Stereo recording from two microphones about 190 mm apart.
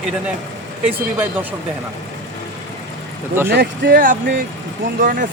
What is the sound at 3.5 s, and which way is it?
Speech, 55° right (ahead or behind).